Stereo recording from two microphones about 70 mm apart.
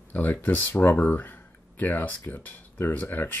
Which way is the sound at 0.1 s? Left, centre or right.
Left.